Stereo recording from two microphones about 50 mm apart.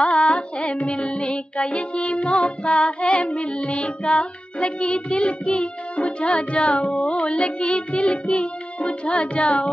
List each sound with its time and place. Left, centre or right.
0.0 s music: left